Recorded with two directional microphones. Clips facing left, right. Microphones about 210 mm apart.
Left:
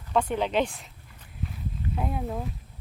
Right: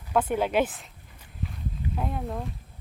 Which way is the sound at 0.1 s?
5° right (ahead or behind).